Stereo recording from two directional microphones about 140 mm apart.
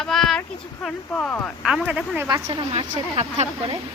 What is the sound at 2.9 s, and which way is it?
Speech, 55° right (ahead or behind).